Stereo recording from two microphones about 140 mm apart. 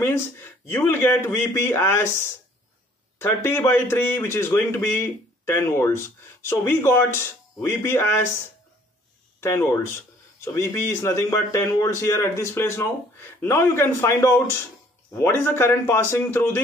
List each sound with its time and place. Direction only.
0.0 s speech: 15° left (ahead or behind)
9.4 s a man's voice: 20° left (ahead or behind)